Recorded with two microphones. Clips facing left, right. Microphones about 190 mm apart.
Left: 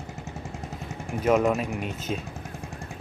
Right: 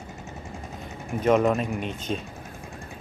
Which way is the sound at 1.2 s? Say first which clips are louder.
Right 1 dB; 5° left (ahead or behind).